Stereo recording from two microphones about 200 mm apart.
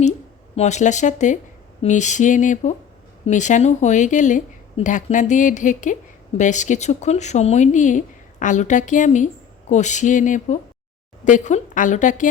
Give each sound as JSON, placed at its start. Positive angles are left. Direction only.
{"t": 0.5, "sound": "speech", "side_deg": 35}